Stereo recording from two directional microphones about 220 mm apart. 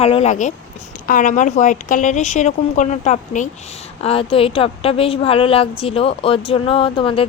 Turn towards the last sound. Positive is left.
turn(degrees=25)  # may be behind; listen again after turning